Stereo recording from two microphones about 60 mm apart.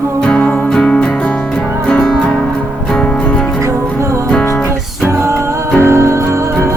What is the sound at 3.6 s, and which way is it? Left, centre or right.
Music, right.